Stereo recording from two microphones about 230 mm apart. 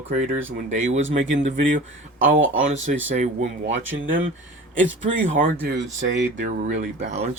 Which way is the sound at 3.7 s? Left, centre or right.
Right.